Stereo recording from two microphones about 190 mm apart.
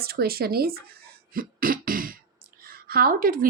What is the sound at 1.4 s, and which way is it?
Music, 50° right (ahead or behind).